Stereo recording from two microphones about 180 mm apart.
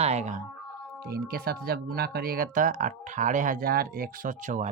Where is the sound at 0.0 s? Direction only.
35° right (ahead or behind).